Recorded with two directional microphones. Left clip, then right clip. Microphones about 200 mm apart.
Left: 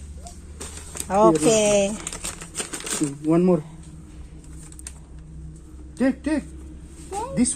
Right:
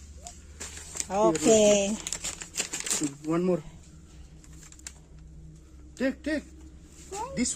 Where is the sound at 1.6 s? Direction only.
10° right (ahead or behind).